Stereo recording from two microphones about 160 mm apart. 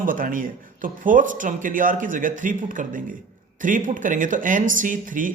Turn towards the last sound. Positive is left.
turn(degrees=-55)  # may be behind; listen again after turning